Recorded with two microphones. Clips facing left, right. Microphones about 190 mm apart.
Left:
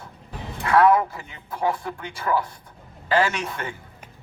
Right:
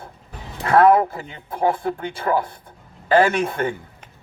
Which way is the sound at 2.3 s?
50° right (ahead or behind).